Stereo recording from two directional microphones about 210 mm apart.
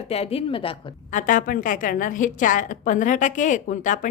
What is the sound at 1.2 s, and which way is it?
A woman's voice, 40° left (ahead or behind).